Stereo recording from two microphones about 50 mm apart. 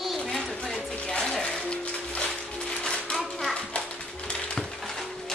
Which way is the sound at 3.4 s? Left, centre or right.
Centre.